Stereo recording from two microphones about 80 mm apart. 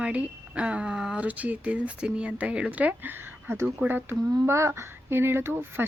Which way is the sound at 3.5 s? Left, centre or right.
Right.